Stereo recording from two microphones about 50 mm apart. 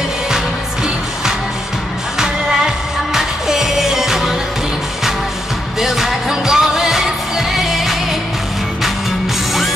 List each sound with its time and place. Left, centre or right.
2.1 s music: centre
5.8 s music: centre